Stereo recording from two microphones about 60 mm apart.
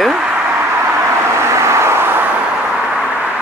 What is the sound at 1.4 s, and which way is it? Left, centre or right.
Vehicle, right.